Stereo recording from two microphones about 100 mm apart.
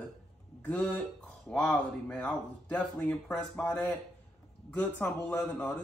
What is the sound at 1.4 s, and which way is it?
Speech, 10° left (ahead or behind).